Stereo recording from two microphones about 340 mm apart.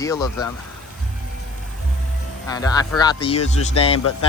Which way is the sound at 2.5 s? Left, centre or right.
Centre.